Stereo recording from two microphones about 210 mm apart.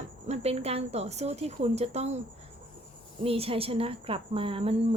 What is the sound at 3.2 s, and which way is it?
A woman's voice, 25° right (ahead or behind).